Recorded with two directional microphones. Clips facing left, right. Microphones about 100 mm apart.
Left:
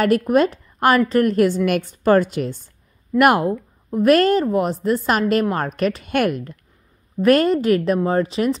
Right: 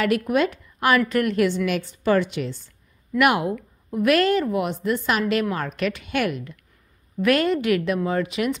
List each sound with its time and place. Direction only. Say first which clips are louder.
0.3 s a woman's voice: left 5 dB; 40° left (ahead or behind)